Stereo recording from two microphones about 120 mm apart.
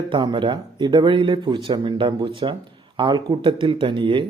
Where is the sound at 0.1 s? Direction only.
40° right (ahead or behind).